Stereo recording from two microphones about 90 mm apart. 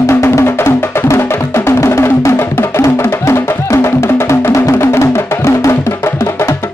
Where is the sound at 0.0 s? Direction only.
30° left (ahead or behind).